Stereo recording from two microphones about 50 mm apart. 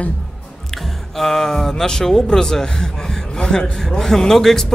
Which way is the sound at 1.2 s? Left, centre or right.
Centre.